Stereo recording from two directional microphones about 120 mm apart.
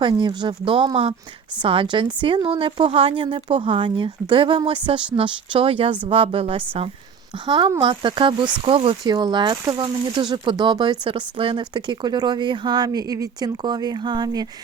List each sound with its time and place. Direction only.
0.0 s a woman's voice: 40° right (ahead or behind)
7.3 s a woman's voice: 40° right (ahead or behind)